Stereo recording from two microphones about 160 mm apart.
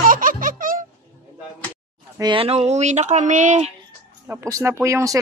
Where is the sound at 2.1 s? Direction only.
30° right (ahead or behind); by 3.7 s 50° right (ahead or behind).